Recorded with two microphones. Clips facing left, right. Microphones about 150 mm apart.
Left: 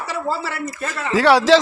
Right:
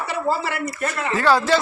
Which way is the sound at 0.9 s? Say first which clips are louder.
Left 4 dB; 85° left.